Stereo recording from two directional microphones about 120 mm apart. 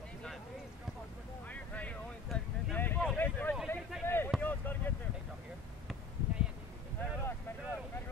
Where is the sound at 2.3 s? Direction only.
5° left (ahead or behind).